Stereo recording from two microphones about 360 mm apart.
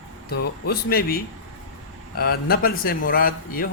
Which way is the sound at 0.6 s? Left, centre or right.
Left.